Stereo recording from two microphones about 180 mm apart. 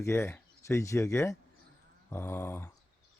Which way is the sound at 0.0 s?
15° left (ahead or behind).